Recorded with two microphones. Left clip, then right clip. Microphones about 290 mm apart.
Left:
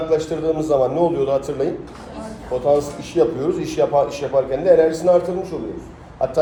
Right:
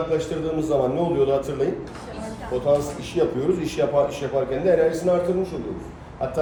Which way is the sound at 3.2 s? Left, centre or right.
Centre.